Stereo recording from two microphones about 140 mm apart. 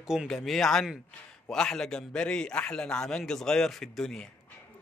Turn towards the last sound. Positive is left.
turn(degrees=5)  # may be behind; listen again after turning